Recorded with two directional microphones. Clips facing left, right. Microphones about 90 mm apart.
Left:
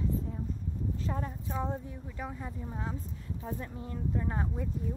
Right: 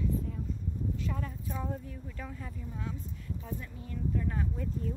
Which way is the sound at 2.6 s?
35° left (ahead or behind).